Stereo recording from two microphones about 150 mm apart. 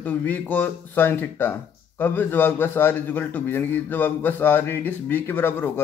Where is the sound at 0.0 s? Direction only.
10° left (ahead or behind).